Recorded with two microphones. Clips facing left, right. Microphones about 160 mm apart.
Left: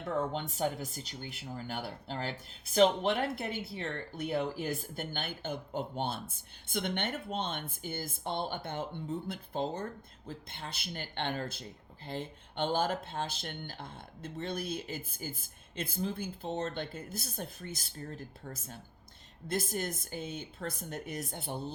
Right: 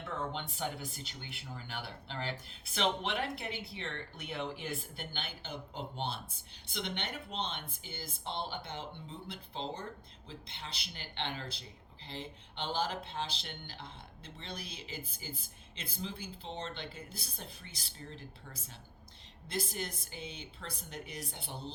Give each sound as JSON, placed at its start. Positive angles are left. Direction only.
{"t": 0.0, "sound": "speech", "side_deg": 40}